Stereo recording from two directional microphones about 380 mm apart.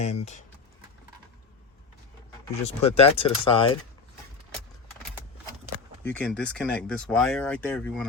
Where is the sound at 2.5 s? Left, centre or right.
Centre.